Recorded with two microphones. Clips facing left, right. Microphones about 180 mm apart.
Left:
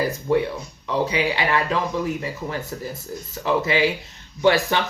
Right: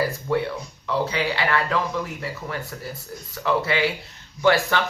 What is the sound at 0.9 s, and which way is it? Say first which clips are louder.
Speech: left 2 dB; 15° left (ahead or behind).